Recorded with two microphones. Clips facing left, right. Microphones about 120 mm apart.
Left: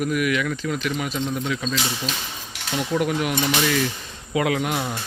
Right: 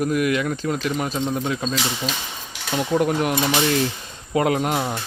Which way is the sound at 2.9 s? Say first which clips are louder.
Right 3 dB; 35° right (ahead or behind).